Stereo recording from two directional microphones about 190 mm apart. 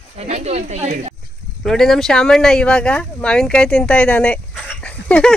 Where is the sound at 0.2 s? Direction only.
35° right (ahead or behind).